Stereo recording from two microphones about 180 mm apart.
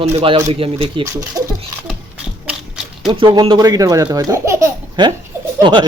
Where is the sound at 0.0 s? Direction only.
35° right (ahead or behind).